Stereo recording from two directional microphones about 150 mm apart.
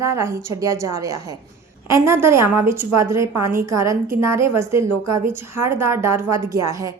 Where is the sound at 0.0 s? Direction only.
20° right (ahead or behind).